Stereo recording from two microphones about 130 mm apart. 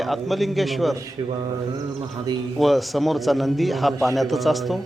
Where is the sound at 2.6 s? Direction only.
Centre (ahead or behind).